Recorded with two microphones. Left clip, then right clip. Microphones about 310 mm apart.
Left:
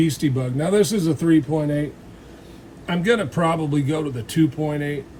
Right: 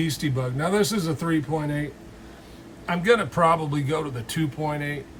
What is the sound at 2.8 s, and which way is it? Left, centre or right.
Speech, centre.